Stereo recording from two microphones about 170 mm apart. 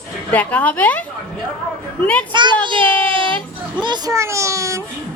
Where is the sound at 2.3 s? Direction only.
25° right (ahead or behind).